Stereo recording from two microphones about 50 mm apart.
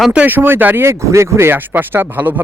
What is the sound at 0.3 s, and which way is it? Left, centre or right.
Speech, right.